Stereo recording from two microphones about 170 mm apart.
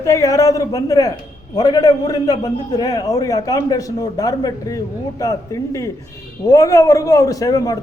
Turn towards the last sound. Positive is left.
turn(degrees=20)  # may be behind; listen again after turning